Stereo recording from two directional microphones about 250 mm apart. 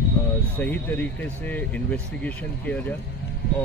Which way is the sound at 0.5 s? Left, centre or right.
Centre.